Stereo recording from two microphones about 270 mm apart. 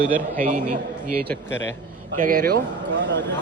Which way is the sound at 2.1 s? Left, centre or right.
Right.